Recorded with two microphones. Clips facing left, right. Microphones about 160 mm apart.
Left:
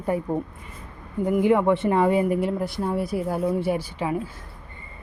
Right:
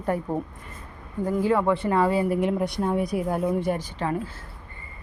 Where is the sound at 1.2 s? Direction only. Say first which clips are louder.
Left 3 dB; 20° left (ahead or behind).